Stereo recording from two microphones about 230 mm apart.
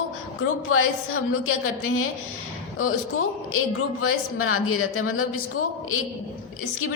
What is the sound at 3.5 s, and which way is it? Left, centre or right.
A woman's voice, left.